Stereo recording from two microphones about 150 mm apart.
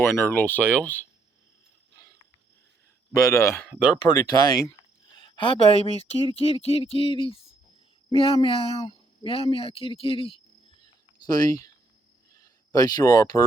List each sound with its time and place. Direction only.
0.0 s speech: 15° left (ahead or behind)
3.1 s speech: 20° left (ahead or behind)
5.2 s speech: 35° left (ahead or behind)
11.3 s speech: 25° left (ahead or behind)
12.7 s speech: 25° left (ahead or behind)